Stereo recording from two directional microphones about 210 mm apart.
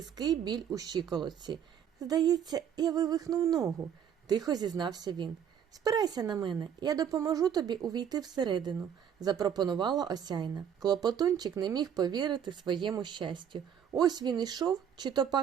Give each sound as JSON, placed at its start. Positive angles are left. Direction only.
{"t": 0.0, "sound": "speech", "side_deg": -20}